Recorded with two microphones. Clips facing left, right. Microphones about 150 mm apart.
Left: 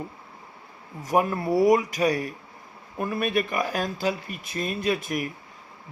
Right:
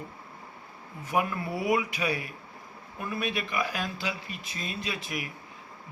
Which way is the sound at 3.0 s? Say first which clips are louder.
Left 7 dB; 50° left (ahead or behind).